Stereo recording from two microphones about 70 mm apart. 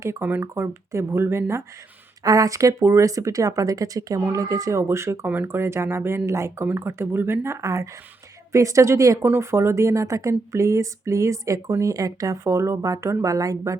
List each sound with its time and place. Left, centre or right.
0.2 s speech: right
2.2 s speech: right
5.2 s speech: right
9.2 s speech: right